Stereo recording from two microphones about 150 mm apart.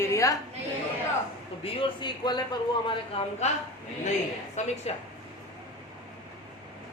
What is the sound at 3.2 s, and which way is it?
Speech, 40° left (ahead or behind).